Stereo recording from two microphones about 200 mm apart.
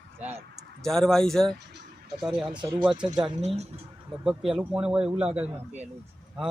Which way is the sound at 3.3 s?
30° right (ahead or behind).